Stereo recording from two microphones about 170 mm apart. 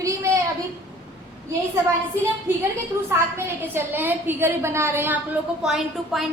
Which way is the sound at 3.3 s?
15° right (ahead or behind).